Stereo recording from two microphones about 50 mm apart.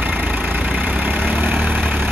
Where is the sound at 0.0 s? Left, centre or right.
Right.